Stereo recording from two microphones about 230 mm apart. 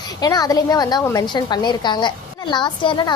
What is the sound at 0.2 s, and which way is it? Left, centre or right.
A woman's voice, centre.